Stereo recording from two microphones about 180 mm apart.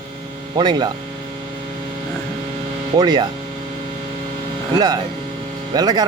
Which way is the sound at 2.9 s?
25° right (ahead or behind).